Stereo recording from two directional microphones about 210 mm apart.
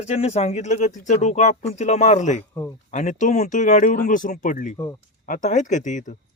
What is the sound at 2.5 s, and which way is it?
Speech, 10° left (ahead or behind).